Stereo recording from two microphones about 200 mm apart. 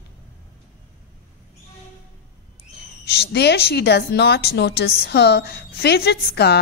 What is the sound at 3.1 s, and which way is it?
A woman's voice, 55° left (ahead or behind).